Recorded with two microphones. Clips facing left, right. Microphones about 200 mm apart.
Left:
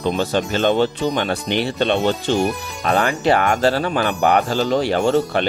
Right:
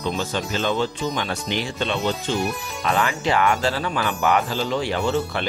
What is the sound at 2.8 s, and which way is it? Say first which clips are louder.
Speech: left 4 dB; 35° left (ahead or behind).